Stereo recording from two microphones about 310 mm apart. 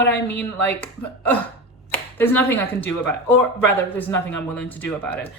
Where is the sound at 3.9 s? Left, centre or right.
Centre.